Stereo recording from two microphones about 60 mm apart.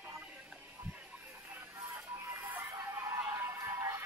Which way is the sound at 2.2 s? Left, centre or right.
Right.